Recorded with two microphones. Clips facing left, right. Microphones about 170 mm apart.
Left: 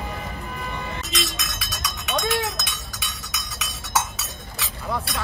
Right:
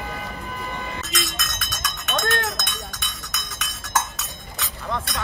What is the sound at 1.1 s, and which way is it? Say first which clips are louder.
Cowbell: even; centre (ahead or behind).